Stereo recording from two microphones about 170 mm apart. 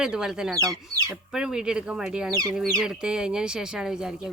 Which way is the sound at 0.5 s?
20° right (ahead or behind).